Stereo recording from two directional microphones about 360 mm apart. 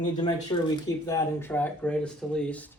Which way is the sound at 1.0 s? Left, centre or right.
Centre.